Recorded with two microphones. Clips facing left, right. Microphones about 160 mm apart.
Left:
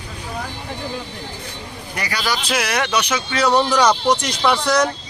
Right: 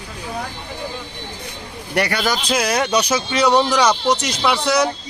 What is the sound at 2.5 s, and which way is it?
Speech, 30° right (ahead or behind).